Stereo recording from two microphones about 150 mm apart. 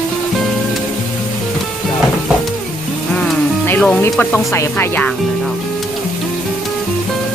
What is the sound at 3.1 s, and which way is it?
Music, 10° left (ahead or behind).